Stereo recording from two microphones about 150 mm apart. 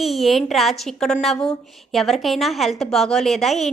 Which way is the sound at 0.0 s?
Centre (ahead or behind).